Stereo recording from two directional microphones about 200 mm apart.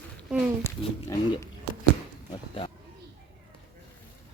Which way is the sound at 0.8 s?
25° left (ahead or behind).